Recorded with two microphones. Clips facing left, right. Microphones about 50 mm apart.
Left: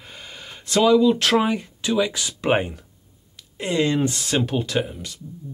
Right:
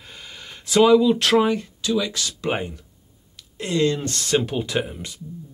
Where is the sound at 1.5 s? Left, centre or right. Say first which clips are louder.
Right 1 dB; centre.